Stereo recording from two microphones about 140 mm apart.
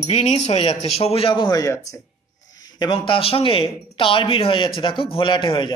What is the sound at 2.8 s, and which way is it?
Speech, 40° left (ahead or behind).